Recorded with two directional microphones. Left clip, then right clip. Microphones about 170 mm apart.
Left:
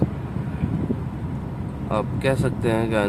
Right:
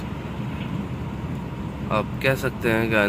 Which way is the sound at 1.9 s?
15° left (ahead or behind).